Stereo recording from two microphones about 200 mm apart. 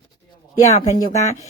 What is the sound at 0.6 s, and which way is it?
Speech, 35° left (ahead or behind).